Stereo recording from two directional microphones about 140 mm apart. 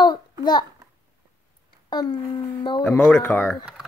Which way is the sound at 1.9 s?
30° left (ahead or behind).